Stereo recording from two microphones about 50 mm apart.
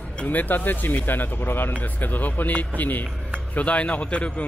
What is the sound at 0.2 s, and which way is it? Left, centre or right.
Speech, left.